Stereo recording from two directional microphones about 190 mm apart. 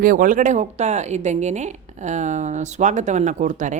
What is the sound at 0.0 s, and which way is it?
A woman's voice, 45° right (ahead or behind).